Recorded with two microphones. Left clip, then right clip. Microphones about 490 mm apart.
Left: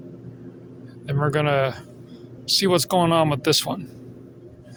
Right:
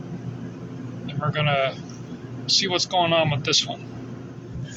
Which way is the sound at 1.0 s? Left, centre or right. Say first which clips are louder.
Left 3 dB; left.